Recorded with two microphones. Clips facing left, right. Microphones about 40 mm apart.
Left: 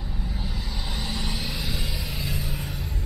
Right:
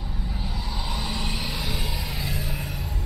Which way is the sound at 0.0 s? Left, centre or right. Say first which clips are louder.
Even; centre.